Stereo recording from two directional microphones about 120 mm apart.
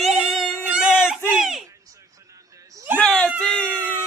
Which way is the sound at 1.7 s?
25° right (ahead or behind).